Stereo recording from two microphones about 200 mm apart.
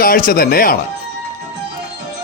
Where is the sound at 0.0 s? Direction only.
45° left (ahead or behind).